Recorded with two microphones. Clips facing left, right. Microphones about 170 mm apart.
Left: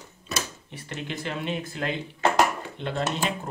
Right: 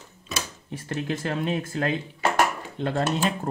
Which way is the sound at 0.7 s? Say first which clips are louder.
Right 5 dB; 40° right (ahead or behind).